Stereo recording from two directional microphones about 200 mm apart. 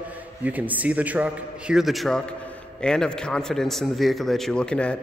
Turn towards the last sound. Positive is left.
turn(degrees=5)  # may be behind; listen again after turning